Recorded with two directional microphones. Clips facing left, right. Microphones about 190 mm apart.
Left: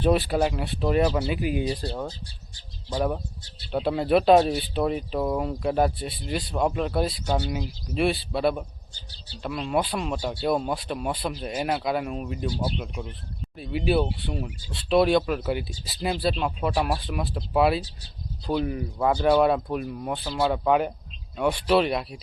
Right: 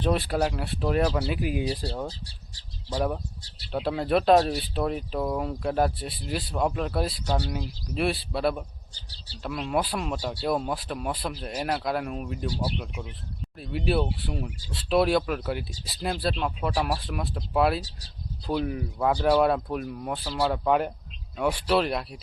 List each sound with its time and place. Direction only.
0.0 s speech: centre (ahead or behind)
2.0 s speech: 35° right (ahead or behind)
2.9 s speech: centre (ahead or behind)
8.9 s speech: 35° right (ahead or behind)
9.4 s speech: centre (ahead or behind)